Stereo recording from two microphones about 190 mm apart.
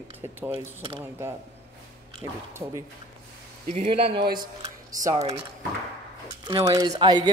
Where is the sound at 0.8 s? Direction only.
20° right (ahead or behind).